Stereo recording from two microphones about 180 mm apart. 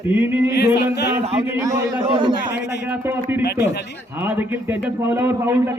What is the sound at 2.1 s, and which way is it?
Speech, 30° right (ahead or behind).